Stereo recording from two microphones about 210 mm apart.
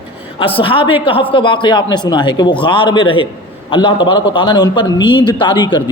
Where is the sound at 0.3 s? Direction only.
25° left (ahead or behind).